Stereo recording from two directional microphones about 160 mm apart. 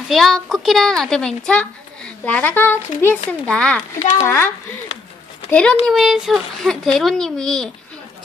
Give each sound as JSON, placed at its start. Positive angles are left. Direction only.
{"t": 0.1, "sound": "a child's voice", "side_deg": 0}
{"t": 4.2, "sound": "a child's voice", "side_deg": 15}
{"t": 5.5, "sound": "a child's voice", "side_deg": 5}